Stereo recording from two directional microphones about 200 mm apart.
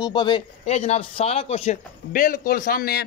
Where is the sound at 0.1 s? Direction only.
25° left (ahead or behind).